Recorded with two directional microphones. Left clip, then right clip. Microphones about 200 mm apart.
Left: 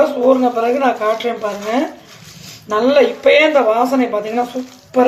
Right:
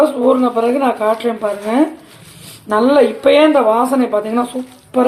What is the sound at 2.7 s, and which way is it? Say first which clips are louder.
Speech: right 1 dB; 25° right (ahead or behind).